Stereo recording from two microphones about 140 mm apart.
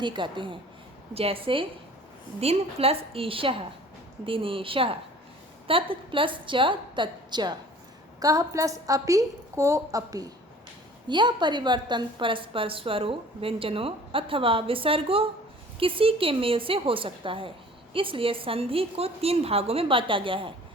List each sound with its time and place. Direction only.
0.0 s a woman's voice: 35° right (ahead or behind)